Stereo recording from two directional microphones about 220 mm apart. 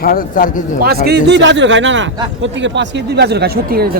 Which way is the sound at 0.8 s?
45° right (ahead or behind).